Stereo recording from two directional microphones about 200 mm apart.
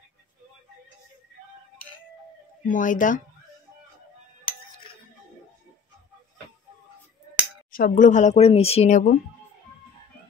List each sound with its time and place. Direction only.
2.7 s speech: 40° left (ahead or behind)
4.5 s music: 25° left (ahead or behind)
7.7 s speech: 45° left (ahead or behind)